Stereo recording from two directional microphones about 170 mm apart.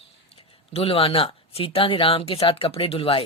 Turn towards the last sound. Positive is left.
turn(degrees=35)  # may be behind; listen again after turning